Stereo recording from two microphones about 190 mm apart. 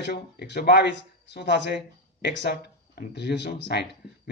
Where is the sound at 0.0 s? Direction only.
60° left (ahead or behind).